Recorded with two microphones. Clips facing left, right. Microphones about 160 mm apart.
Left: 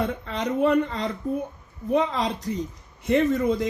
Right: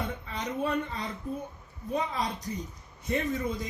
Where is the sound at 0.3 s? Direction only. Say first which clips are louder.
Left 10 dB; 80° left.